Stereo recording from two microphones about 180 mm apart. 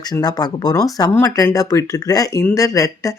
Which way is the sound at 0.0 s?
20° left (ahead or behind).